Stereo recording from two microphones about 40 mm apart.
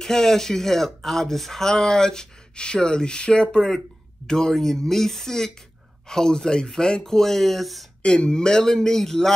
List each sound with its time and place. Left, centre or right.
0.0 s speech: centre
8.0 s speech: left